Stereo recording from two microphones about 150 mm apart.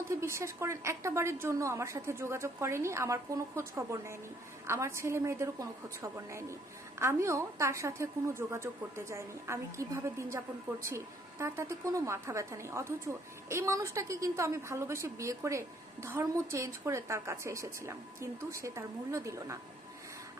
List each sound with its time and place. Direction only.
0.2 s a woman's voice: 20° right (ahead or behind)